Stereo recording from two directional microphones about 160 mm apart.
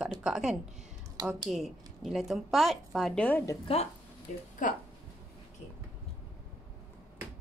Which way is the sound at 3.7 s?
35° left (ahead or behind).